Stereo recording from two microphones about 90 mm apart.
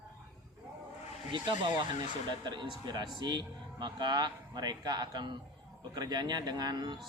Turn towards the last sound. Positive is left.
turn(degrees=-55)  # may be behind; listen again after turning